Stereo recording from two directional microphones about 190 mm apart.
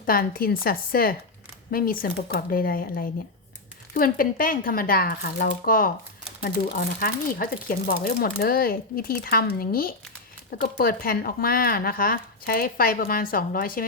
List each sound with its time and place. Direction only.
0.0 s speech: 50° left (ahead or behind)